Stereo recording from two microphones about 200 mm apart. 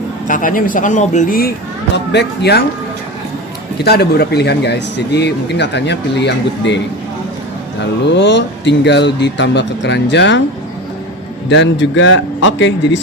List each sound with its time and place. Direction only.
0.3 s speech: 40° left (ahead or behind)
3.8 s speech: 55° left (ahead or behind)
8.1 s speech: 60° left (ahead or behind)
11.4 s speech: 60° left (ahead or behind)